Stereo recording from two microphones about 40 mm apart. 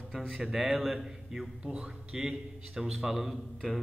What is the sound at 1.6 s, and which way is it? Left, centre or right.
Speech, right.